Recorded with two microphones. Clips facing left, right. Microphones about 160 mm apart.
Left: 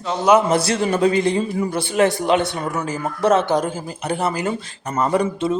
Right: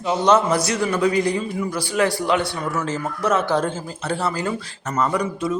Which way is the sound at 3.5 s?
15° left (ahead or behind).